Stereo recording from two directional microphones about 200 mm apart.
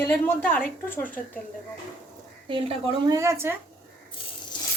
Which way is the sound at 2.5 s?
20° right (ahead or behind).